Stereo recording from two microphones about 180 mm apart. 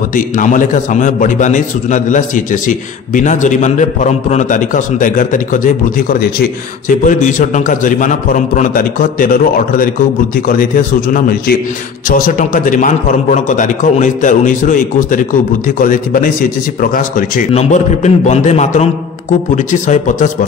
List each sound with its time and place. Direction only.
0.1 s a man's voice: 45° left (ahead or behind)
11.1 s a man's voice: 55° left (ahead or behind)
17.5 s a man's voice: 40° left (ahead or behind)